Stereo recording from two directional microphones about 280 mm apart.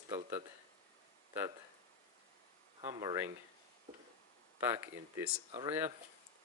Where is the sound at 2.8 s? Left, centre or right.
Centre.